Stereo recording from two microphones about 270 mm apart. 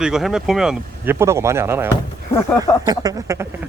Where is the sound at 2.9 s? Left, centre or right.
Centre.